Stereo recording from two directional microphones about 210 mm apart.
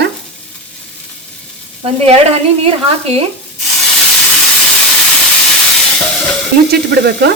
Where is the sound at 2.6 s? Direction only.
25° right (ahead or behind).